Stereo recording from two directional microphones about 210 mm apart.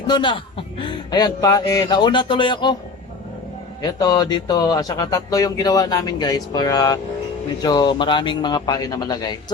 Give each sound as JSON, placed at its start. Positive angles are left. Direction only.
{"t": 0.1, "sound": "speech", "side_deg": 20}
{"t": 3.8, "sound": "speech", "side_deg": 20}